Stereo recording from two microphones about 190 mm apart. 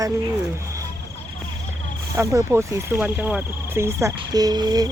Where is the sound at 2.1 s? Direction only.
15° right (ahead or behind).